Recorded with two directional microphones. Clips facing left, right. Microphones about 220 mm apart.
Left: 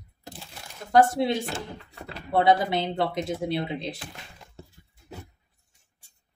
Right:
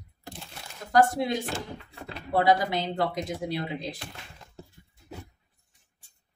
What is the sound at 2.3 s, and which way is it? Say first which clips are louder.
Speech: left 2 dB; 25° left (ahead or behind).